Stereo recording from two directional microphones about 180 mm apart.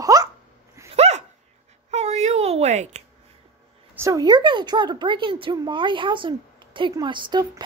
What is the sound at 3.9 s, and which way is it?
A woman's voice, 15° right (ahead or behind).